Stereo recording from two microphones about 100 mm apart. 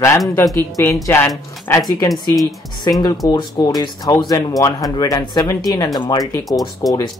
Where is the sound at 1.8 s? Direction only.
40° left (ahead or behind).